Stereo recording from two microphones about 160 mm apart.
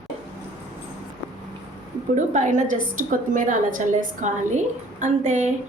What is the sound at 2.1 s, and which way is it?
A woman's voice, 50° right (ahead or behind).